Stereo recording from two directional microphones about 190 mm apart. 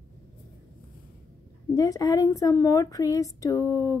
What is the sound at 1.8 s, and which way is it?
A woman's voice, 20° left (ahead or behind).